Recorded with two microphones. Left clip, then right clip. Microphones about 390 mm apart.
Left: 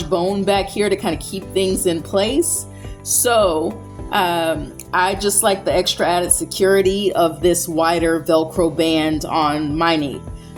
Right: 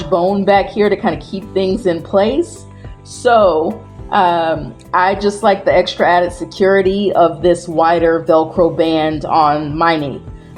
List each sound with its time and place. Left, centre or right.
0.1 s a woman's voice: left